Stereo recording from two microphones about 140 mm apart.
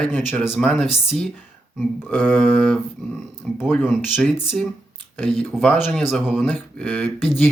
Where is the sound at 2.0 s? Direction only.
15° left (ahead or behind).